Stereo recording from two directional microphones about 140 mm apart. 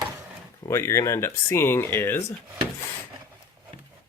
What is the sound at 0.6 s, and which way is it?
Speech, 20° left (ahead or behind).